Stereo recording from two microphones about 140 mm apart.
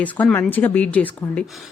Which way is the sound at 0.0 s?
10° left (ahead or behind).